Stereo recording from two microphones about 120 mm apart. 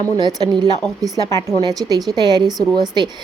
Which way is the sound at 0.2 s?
35° right (ahead or behind).